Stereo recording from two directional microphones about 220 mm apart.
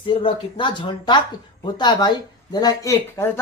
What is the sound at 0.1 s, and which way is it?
Speech, 25° left (ahead or behind).